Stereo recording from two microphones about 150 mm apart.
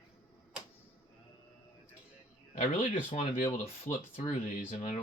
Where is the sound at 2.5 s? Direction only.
55° left (ahead or behind).